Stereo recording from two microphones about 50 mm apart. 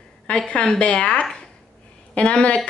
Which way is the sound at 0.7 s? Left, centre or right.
Left.